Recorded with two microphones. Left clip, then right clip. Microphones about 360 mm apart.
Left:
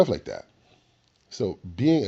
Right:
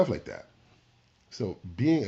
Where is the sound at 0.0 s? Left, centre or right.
Left.